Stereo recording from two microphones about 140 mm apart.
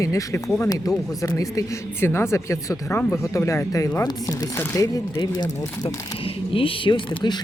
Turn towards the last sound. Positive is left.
turn(degrees=35)  # may be behind; listen again after turning